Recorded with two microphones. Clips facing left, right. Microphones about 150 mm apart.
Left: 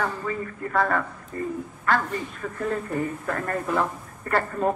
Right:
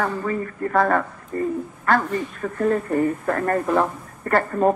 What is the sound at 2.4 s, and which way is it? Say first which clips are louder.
Speech: right 8 dB; 50° right (ahead or behind).